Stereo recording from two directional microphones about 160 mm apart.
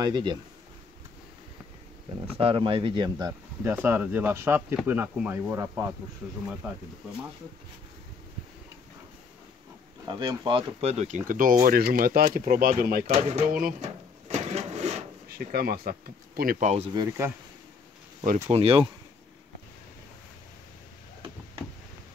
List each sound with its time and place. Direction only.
0.0 s speech: 30° right (ahead or behind)
2.3 s speech: 35° right (ahead or behind)
3.6 s speech: 15° right (ahead or behind)
10.0 s speech: 25° right (ahead or behind)
10.8 s speech: 45° right (ahead or behind); by 13.0 s 65° right (ahead or behind)
13.0 s speech: 45° right (ahead or behind)
13.5 s speech: 65° right (ahead or behind)
13.7 s drawer open or close: 45° right (ahead or behind)
15.2 s speech: 70° right (ahead or behind); by 16.9 s 45° right (ahead or behind)
16.9 s speech: 25° right (ahead or behind)
18.5 s speech: 35° right (ahead or behind)